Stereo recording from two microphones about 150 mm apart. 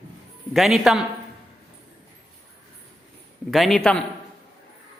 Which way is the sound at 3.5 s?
Centre (ahead or behind).